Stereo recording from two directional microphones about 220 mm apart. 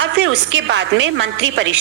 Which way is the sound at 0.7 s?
55° right (ahead or behind).